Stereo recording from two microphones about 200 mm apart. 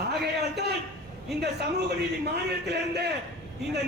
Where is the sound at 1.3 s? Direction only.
55° right (ahead or behind).